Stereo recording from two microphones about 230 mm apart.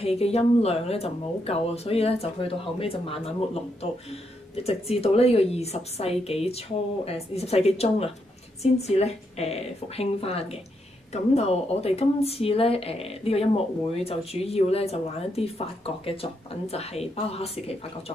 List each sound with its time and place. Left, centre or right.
0.0 s speech: left
4.6 s speech: left